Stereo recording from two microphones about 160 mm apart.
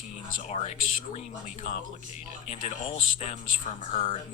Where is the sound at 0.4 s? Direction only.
45° left (ahead or behind).